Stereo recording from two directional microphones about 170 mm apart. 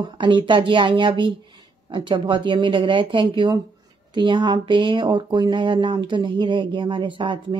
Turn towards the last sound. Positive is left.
turn(degrees=-30)  # may be behind; listen again after turning